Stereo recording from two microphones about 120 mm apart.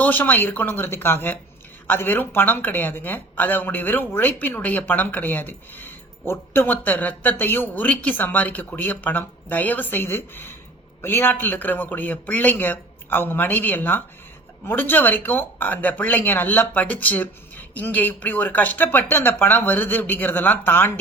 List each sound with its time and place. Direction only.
0.0 s a woman's voice: 15° left (ahead or behind)